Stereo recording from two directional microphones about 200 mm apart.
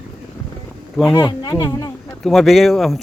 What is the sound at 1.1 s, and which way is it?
Speech, 20° left (ahead or behind).